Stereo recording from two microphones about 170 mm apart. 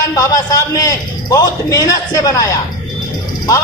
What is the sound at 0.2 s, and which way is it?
A man's voice, 20° left (ahead or behind).